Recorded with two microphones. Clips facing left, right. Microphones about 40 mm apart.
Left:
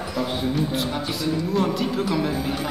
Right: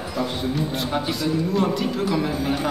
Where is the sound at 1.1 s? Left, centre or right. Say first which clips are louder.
Left 1 dB; centre.